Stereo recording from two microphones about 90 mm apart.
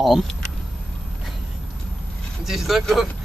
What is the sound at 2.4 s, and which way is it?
Speech, 5° right (ahead or behind).